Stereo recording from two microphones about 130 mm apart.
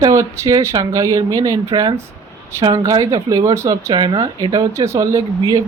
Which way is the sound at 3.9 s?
35° right (ahead or behind).